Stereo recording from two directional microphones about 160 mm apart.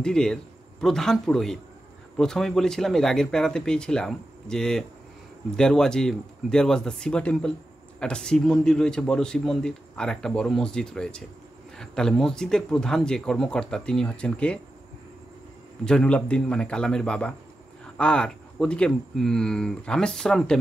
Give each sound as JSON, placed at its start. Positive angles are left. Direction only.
{"t": 0.0, "sound": "a man's voice", "side_deg": 5}
{"t": 15.8, "sound": "a man's voice", "side_deg": 5}